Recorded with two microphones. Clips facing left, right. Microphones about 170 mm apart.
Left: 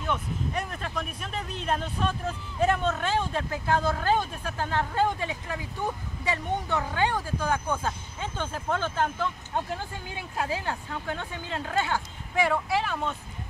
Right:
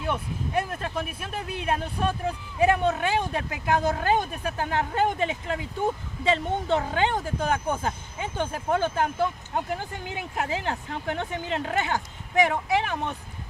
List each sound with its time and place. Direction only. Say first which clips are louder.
0.9 s speech: right 2 dB; 5° right (ahead or behind)